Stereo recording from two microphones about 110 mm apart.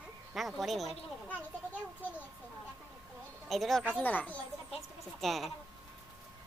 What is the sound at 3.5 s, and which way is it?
Speech, centre (ahead or behind).